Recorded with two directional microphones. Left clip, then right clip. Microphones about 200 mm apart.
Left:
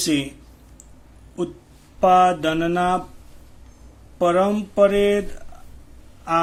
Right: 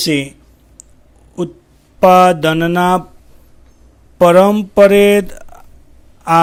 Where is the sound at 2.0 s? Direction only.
45° right (ahead or behind).